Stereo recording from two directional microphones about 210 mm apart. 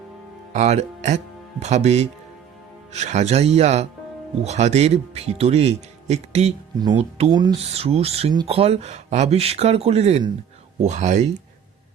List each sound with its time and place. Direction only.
0.5 s speech: 30° right (ahead or behind)
6.7 s speech: 20° right (ahead or behind)